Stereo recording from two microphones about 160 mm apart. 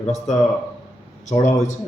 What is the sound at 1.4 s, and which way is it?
Speech, 50° left (ahead or behind).